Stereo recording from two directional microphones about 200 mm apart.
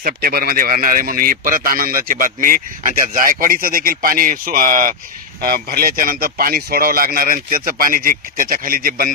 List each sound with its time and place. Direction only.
0.0 s speech: 45° right (ahead or behind)